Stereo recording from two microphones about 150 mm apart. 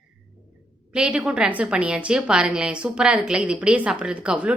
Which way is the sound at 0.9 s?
5° right (ahead or behind).